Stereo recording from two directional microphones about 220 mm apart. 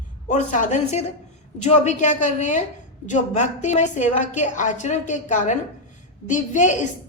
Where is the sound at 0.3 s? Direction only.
35° left (ahead or behind).